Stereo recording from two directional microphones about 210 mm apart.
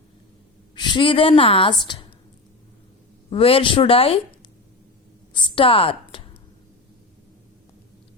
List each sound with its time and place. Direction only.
0.8 s a woman's voice: 20° left (ahead or behind)
3.2 s a woman's voice: 25° left (ahead or behind)
5.3 s a sound: 20° left (ahead or behind)